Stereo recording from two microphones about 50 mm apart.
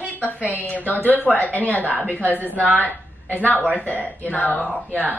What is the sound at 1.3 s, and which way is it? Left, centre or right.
A woman's voice, left.